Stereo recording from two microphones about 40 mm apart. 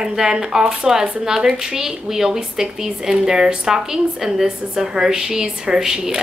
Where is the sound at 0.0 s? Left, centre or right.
Centre.